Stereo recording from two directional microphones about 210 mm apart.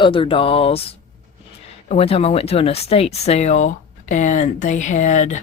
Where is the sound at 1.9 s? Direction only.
30° left (ahead or behind).